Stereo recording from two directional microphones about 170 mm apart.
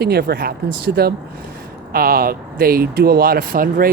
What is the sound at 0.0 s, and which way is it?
Speech, 70° right (ahead or behind).